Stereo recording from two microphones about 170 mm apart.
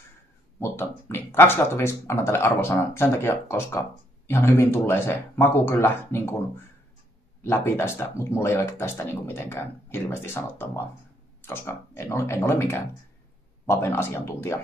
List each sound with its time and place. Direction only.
0.6 s speech: 15° left (ahead or behind)
7.4 s speech: 15° left (ahead or behind)